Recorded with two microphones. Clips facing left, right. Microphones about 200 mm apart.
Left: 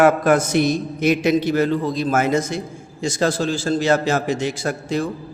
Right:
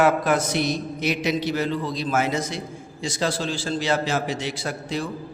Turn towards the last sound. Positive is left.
turn(degrees=45)  # may be behind; listen again after turning